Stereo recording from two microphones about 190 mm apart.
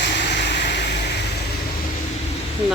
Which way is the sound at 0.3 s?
65° left (ahead or behind).